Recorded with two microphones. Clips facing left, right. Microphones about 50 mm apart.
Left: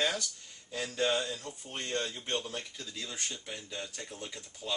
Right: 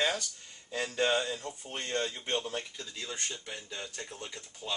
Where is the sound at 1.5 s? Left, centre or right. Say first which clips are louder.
Right 1 dB; centre.